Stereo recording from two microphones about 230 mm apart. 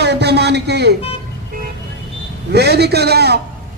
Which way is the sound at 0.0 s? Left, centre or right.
Right.